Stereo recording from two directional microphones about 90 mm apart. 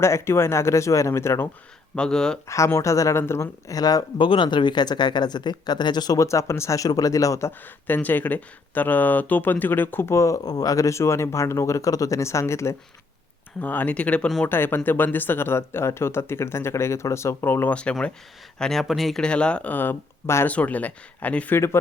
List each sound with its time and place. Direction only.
0.0 s speech: 30° left (ahead or behind)
2.0 s speech: 5° left (ahead or behind)
2.5 s speech: 35° left (ahead or behind)
4.2 s speech: 65° left (ahead or behind); by 6.2 s 50° left (ahead or behind)
6.2 s speech: 30° left (ahead or behind)
7.9 s speech: 20° left (ahead or behind)
13.6 s speech: 20° left (ahead or behind)
18.6 s speech: 5° left (ahead or behind); by 20.5 s 25° left (ahead or behind)
20.5 s speech: 15° left (ahead or behind)